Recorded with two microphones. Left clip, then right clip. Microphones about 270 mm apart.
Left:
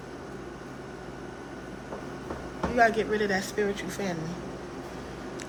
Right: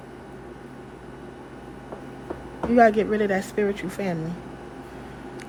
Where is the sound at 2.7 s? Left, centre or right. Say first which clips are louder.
Right 6 dB; right.